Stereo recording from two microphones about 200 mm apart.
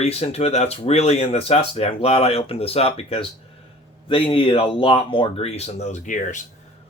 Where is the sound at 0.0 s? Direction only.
30° left (ahead or behind).